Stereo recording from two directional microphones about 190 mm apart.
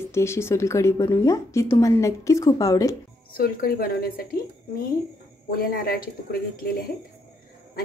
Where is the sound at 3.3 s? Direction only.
50° left (ahead or behind).